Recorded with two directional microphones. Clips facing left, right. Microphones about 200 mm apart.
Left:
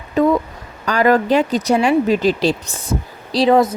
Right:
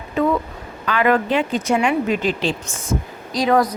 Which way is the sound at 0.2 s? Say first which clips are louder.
Left 4 dB; 40° left (ahead or behind).